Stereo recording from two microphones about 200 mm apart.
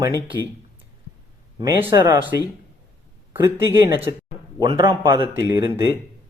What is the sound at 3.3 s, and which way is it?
Speech, 15° right (ahead or behind).